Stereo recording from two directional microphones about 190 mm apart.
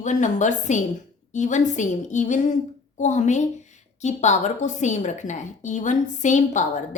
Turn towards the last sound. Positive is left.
turn(degrees=40)  # may be behind; listen again after turning